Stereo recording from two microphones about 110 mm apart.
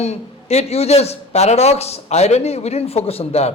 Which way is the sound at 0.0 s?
75° left (ahead or behind).